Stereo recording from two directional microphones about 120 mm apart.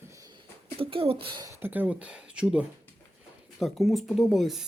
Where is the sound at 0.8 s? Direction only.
50° right (ahead or behind).